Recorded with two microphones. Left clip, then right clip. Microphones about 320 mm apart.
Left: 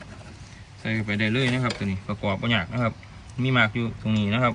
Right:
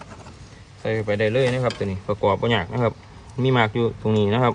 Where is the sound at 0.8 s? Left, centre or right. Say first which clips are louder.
Right 5 dB; centre.